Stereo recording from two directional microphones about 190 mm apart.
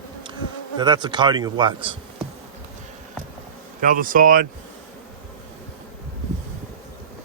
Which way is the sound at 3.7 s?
45° right (ahead or behind).